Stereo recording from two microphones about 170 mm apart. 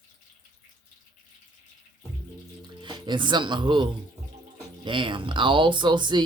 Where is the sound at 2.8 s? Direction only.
25° right (ahead or behind).